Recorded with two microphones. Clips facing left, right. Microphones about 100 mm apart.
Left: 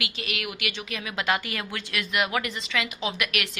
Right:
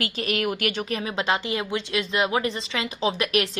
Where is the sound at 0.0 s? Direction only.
40° right (ahead or behind).